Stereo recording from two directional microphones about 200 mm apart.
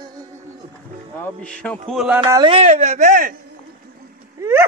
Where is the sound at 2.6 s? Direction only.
35° right (ahead or behind).